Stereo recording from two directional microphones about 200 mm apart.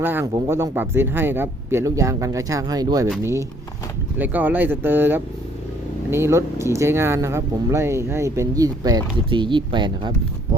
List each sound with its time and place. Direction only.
0.0 s speech: 10° right (ahead or behind)
4.2 s speech: 10° right (ahead or behind)